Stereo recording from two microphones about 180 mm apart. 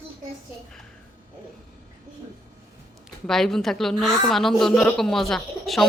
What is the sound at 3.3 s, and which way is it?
A woman's voice, centre (ahead or behind).